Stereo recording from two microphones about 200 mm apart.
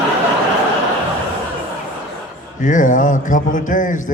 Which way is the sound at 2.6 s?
40° left (ahead or behind).